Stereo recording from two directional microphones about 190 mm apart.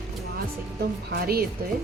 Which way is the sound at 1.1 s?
55° right (ahead or behind).